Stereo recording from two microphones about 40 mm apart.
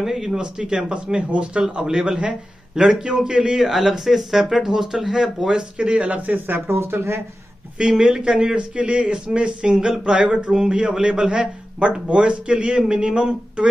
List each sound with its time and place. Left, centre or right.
0.0 s speech: centre
0.4 s a man's voice: right
5.6 s a man's voice: right
6.0 s speech: right
6.3 s speech: right
8.0 s a man's voice: right